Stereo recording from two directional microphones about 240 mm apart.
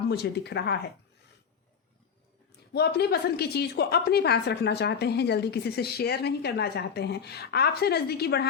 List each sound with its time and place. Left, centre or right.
0.1 s a woman's voice: left
2.7 s a woman's voice: left